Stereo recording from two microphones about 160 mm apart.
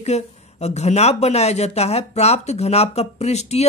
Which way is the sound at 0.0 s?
45° left (ahead or behind).